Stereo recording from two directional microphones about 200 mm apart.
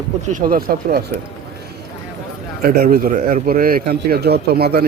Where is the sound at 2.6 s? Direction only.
50° right (ahead or behind).